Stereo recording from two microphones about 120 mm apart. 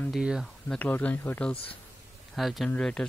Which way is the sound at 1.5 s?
50° left (ahead or behind).